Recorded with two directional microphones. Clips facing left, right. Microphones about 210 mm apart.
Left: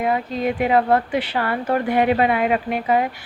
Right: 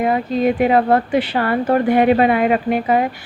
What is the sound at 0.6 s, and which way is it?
A woman's voice, 40° right (ahead or behind).